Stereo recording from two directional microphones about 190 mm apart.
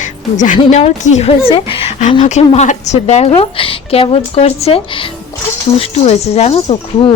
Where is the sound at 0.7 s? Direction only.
35° left (ahead or behind).